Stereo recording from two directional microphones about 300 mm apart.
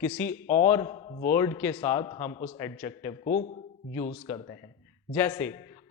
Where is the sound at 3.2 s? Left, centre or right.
Left.